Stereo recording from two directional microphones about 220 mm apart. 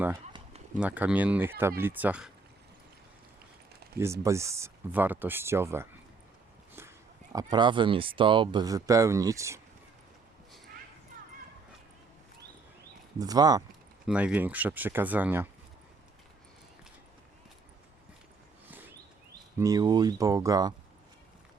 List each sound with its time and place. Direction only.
0.3 s a sound: 30° right (ahead or behind)
0.8 s speech: 5° right (ahead or behind)
3.9 s speech: 10° right (ahead or behind)
7.3 s speech: 20° right (ahead or behind)
13.1 s speech: 15° right (ahead or behind)
14.1 s speech: 5° right (ahead or behind)
19.5 s speech: 15° right (ahead or behind)